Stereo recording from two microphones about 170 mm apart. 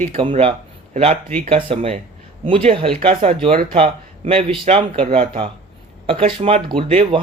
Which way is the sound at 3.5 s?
55° right (ahead or behind).